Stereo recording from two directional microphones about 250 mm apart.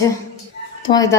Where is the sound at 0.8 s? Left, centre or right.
Centre.